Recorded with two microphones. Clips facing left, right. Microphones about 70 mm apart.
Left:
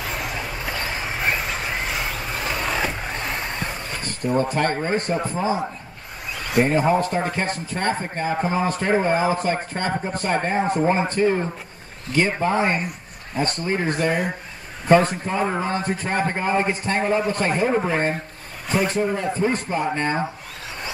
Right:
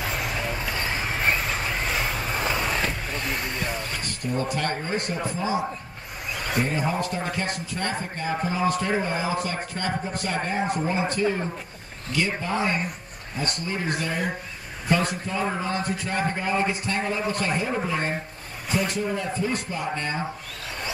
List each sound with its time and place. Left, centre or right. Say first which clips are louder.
4.0 s a man's voice: left 10 dB; left
6.6 s a man's voice: left 9 dB; left